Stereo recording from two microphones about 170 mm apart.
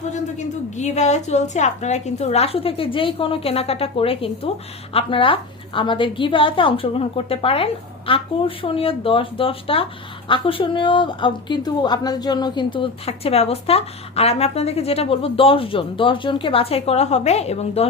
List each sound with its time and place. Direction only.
0.3 s speech: 45° left (ahead or behind)